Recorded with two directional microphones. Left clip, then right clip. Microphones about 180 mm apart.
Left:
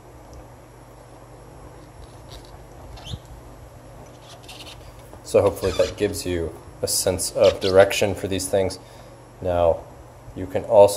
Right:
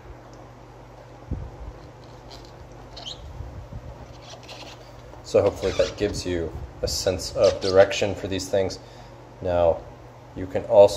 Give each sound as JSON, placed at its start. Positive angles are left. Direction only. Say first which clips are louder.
{"t": 5.3, "sound": "speech", "louder": "left 2 dB", "side_deg": 20}
{"t": 7.4, "sound": "speech", "louder": "left 2 dB", "side_deg": 15}
{"t": 7.8, "sound": "speech", "louder": "left 2 dB", "side_deg": 30}